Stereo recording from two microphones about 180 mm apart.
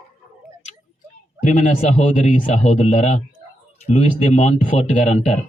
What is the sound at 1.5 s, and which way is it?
Speech, 40° left (ahead or behind).